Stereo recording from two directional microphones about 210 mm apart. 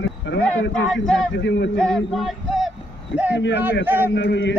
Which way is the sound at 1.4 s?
55° left (ahead or behind).